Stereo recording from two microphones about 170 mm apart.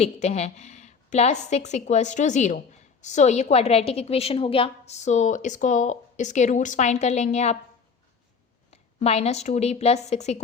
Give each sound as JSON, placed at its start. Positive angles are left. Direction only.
{"t": 0.0, "sound": "a woman's voice", "side_deg": 40}
{"t": 8.7, "sound": "a woman's voice", "side_deg": 40}